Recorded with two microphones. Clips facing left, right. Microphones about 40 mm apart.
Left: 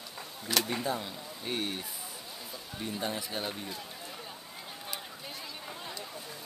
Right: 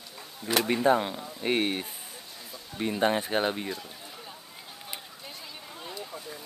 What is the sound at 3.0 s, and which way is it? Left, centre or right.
Speech, right.